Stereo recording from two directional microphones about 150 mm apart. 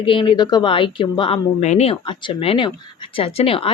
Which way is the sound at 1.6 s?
50° left (ahead or behind).